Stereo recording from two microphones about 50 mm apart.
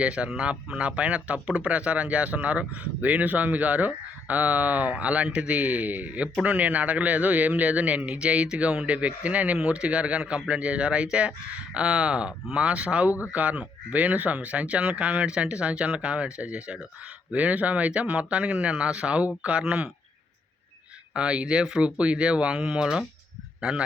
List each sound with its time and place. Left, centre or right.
0.0 s speech: right
21.1 s speech: right